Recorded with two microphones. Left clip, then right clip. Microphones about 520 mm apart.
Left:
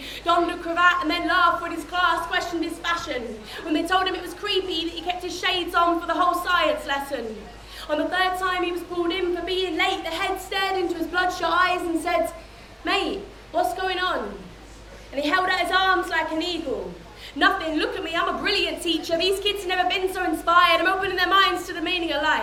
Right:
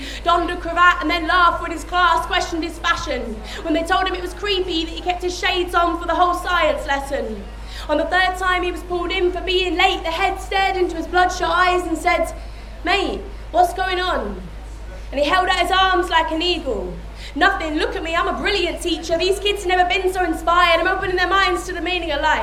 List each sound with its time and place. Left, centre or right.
0.3 s speech: right
3.7 s a woman's voice: right
7.9 s a woman's voice: right